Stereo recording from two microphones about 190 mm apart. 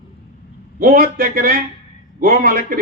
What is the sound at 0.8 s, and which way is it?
Speech, 50° right (ahead or behind).